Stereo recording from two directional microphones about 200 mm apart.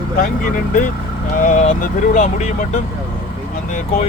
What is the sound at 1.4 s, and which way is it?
Speech, 40° left (ahead or behind).